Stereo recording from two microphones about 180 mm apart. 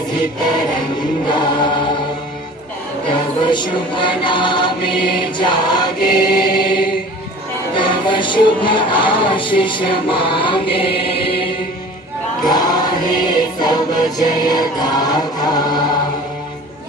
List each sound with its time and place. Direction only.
1.3 s music: 25° left (ahead or behind)
3.1 s music: 25° left (ahead or behind)
5.4 s choir: 25° left (ahead or behind)
6.1 s chant: 55° left (ahead or behind)
7.8 s music: 25° left (ahead or behind)
12.5 s choir: 20° left (ahead or behind)